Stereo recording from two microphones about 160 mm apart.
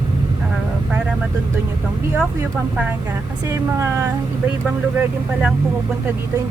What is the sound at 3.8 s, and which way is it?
Speech, 15° right (ahead or behind).